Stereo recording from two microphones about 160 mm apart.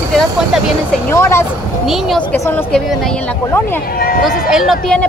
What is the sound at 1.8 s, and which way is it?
Speech, centre (ahead or behind).